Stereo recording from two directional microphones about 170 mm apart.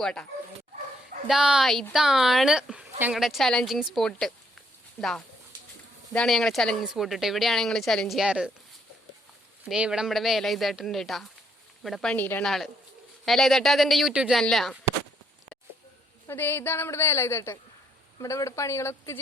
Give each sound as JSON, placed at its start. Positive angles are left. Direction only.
{"t": 0.0, "sound": "a woman's voice", "side_deg": 5}
{"t": 1.3, "sound": "a woman's voice", "side_deg": -5}
{"t": 9.6, "sound": "a woman's voice", "side_deg": -5}
{"t": 16.2, "sound": "a woman's voice", "side_deg": 10}